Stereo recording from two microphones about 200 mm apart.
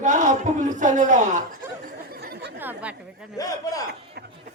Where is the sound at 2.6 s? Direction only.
10° right (ahead or behind).